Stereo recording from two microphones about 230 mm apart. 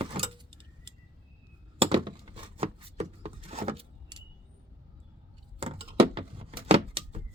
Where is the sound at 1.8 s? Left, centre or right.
Right.